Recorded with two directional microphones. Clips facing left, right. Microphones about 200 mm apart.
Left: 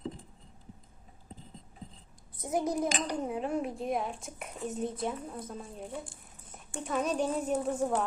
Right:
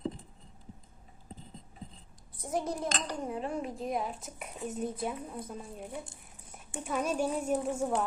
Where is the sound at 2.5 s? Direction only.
5° left (ahead or behind).